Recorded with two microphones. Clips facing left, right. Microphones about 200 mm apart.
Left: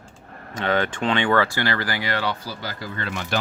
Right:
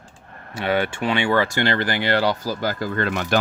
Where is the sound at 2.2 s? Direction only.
40° right (ahead or behind).